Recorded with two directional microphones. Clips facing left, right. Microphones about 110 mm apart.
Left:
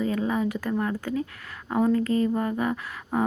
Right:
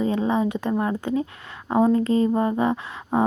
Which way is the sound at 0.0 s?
25° right (ahead or behind).